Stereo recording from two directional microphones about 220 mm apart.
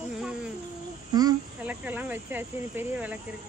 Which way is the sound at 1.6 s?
5° right (ahead or behind).